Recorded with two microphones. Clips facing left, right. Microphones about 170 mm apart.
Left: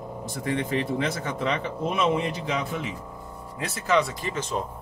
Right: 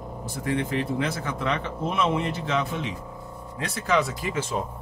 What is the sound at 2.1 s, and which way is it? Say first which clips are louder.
Speech: even; 15° left (ahead or behind).